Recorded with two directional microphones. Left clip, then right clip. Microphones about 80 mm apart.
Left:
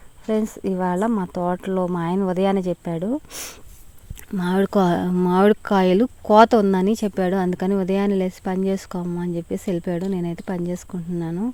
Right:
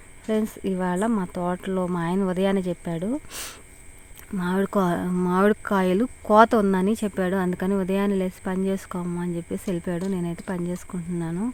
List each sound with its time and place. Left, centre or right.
0.3 s speech: left
4.4 s speech: left
6.2 s a woman's voice: left
8.6 s a woman's voice: left